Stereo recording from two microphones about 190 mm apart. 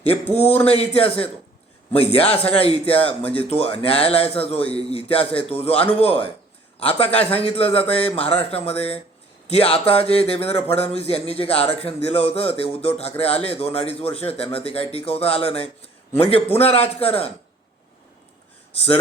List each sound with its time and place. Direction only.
0.6 s speech: 30° left (ahead or behind)
18.7 s speech: 30° left (ahead or behind)